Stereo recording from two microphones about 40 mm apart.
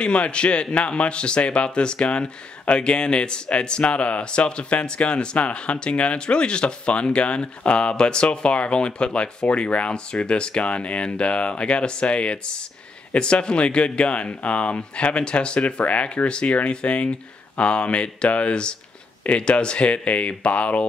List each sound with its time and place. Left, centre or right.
0.0 s speech: left
15.8 s speech: left